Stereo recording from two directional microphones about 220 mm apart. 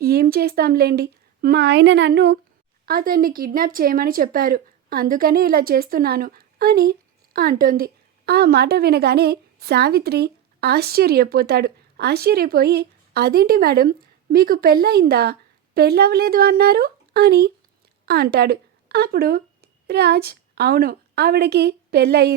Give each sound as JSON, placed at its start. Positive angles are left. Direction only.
{"t": 0.0, "sound": "a woman's voice", "side_deg": -45}